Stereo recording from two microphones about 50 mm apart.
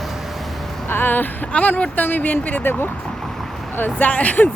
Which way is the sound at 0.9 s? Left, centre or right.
Left.